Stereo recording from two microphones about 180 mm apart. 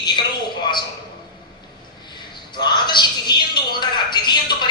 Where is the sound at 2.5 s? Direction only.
25° left (ahead or behind).